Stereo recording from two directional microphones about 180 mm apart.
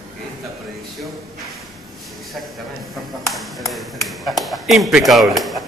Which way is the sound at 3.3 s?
Centre (ahead or behind).